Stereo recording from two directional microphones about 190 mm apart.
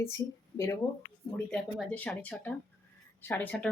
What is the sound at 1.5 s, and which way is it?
A woman's voice, 5° left (ahead or behind).